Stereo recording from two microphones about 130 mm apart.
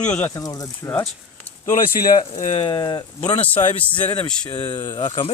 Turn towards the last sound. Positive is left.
turn(degrees=50)  # may be behind; listen again after turning